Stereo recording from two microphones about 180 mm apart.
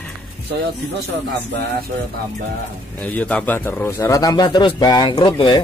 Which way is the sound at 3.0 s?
10° left (ahead or behind).